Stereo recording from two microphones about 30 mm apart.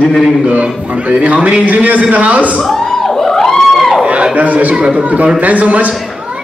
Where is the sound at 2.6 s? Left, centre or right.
Centre.